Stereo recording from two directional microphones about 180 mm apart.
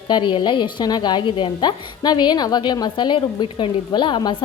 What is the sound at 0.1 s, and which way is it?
A woman's voice, 25° left (ahead or behind).